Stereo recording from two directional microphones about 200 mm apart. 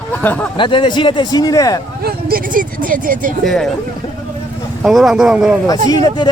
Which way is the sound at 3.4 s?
Centre (ahead or behind).